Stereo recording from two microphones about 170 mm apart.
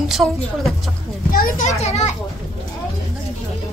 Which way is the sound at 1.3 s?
55° left (ahead or behind).